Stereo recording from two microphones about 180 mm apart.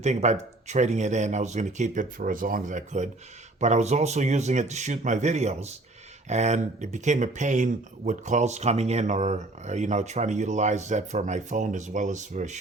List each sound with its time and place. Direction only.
0.0 s speech: 40° right (ahead or behind)